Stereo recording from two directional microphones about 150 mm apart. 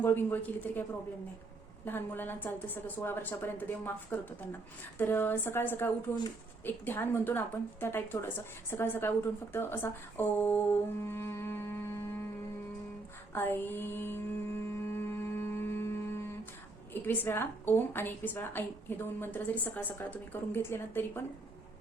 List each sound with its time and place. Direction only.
0.0 s a woman's voice: 15° left (ahead or behind)
13.3 s mantra: 15° left (ahead or behind)
16.9 s a woman's voice: 15° left (ahead or behind)